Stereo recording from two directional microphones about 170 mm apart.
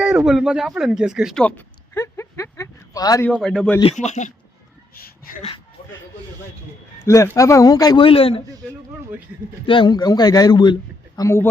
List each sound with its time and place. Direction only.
0.0 s speech: 5° right (ahead or behind); by 3.2 s 20° left (ahead or behind)
3.2 s a man's voice: 5° left (ahead or behind)
3.9 s speech: 45° left (ahead or behind)
7.0 s a man's voice: 20° left (ahead or behind); by 8.4 s 35° left (ahead or behind)
9.6 s a man's voice: 30° left (ahead or behind)
11.2 s speech: 15° left (ahead or behind)